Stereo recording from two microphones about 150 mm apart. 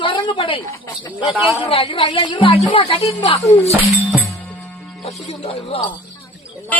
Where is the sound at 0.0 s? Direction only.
35° left (ahead or behind).